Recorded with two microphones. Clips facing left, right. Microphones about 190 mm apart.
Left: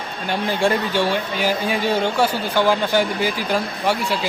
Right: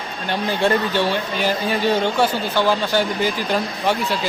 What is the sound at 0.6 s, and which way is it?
Speech, 10° left (ahead or behind).